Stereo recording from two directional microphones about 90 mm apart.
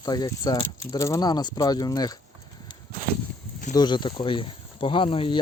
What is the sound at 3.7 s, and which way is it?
Speech, 55° left (ahead or behind).